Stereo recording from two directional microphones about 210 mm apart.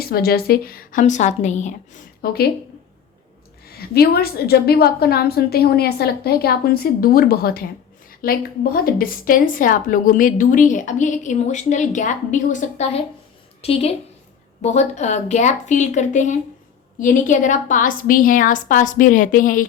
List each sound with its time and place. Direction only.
0.0 s a woman's voice: 45° left (ahead or behind)
3.7 s a woman's voice: 50° left (ahead or behind)